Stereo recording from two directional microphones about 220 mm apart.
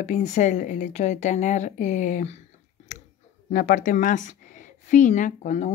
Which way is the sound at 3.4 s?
35° left (ahead or behind).